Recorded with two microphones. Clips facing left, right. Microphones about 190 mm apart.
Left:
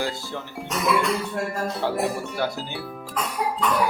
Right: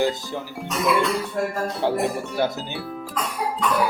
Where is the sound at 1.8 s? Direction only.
15° right (ahead or behind).